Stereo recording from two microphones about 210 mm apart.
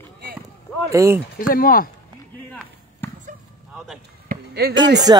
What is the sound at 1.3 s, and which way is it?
Speech, 45° left (ahead or behind).